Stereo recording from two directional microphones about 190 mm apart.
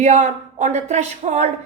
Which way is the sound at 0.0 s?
35° right (ahead or behind).